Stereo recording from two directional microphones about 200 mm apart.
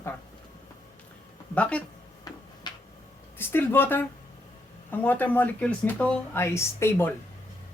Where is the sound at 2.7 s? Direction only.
20° left (ahead or behind).